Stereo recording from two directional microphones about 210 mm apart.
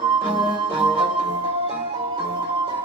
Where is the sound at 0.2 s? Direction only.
25° right (ahead or behind).